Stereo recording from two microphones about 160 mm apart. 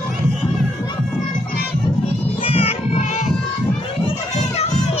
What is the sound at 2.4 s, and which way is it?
Music, 35° left (ahead or behind).